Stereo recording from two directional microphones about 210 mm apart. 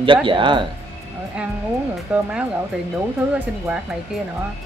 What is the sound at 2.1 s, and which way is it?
Speech, 5° right (ahead or behind).